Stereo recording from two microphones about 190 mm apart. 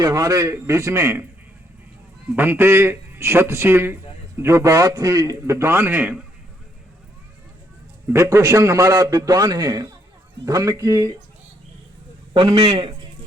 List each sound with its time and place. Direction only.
0.0 s a man's voice: 20° right (ahead or behind)
2.3 s a man's voice: 10° right (ahead or behind)
8.1 s a man's voice: 15° right (ahead or behind)
12.3 s a man's voice: 25° right (ahead or behind)